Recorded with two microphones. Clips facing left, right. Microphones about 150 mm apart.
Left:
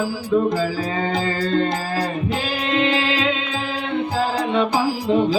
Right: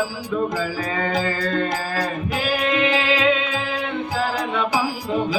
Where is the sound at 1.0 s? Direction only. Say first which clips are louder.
Even; 30° left (ahead or behind).